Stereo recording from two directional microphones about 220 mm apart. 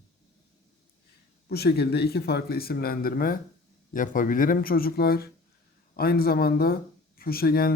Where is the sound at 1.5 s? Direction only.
45° left (ahead or behind).